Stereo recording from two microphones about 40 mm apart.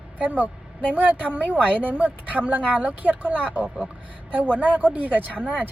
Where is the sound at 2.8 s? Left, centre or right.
Right.